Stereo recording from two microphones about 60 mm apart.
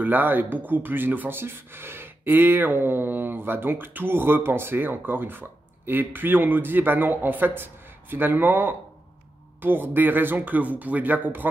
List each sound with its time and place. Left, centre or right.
0.0 s speech: right